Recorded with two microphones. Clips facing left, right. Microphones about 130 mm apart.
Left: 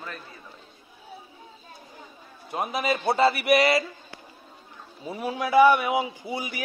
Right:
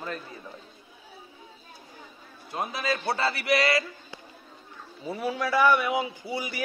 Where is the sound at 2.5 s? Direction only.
20° left (ahead or behind).